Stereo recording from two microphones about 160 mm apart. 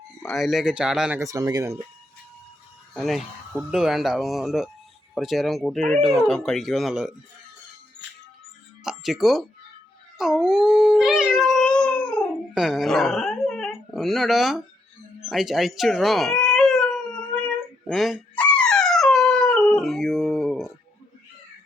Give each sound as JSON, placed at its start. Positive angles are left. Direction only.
{"t": 0.2, "sound": "speech", "side_deg": 0}
{"t": 1.2, "sound": "speech", "side_deg": -20}
{"t": 2.9, "sound": "speech", "side_deg": 0}
{"t": 8.8, "sound": "music", "side_deg": 0}
{"t": 10.2, "sound": "dog", "side_deg": -5}
{"t": 15.3, "sound": "a sound", "side_deg": 0}
{"t": 17.8, "sound": "dog", "side_deg": 0}